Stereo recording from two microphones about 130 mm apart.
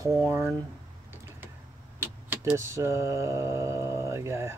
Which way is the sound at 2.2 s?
20° right (ahead or behind).